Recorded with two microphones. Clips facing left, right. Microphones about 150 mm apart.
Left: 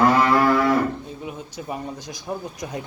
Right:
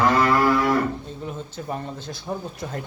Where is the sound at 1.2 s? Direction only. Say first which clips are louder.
Right 3 dB; 5° left (ahead or behind).